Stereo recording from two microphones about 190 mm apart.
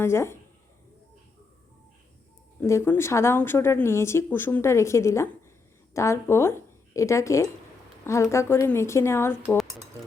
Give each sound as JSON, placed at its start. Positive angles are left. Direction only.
{"t": 0.0, "sound": "speech", "side_deg": 15}
{"t": 2.6, "sound": "speech", "side_deg": 15}